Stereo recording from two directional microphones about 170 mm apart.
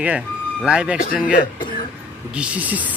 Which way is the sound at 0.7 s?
5° right (ahead or behind).